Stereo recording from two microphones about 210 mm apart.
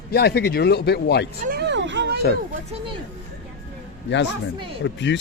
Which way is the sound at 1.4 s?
45° right (ahead or behind).